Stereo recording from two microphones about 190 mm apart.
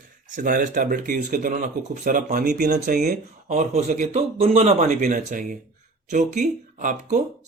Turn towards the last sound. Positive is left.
turn(degrees=-40)  # may be behind; listen again after turning